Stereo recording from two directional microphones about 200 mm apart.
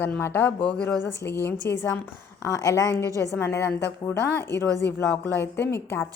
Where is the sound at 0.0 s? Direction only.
10° left (ahead or behind).